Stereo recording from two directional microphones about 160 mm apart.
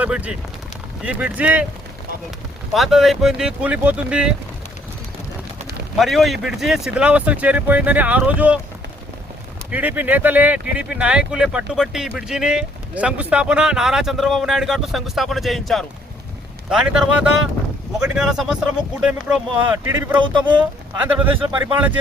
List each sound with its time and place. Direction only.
0.0 s speech: 10° right (ahead or behind)
2.7 s speech: centre (ahead or behind)
6.0 s speech: centre (ahead or behind)
9.7 s speech: 10° right (ahead or behind)
20.1 s speech: 30° right (ahead or behind)
21.0 s speech: 10° right (ahead or behind)